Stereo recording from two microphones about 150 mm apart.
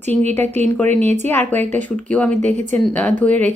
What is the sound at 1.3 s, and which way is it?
Speech, 10° left (ahead or behind).